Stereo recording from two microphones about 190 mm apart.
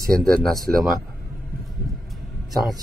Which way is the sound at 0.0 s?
5° left (ahead or behind).